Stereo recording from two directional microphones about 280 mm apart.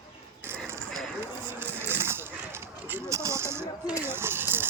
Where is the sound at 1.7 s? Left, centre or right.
Centre.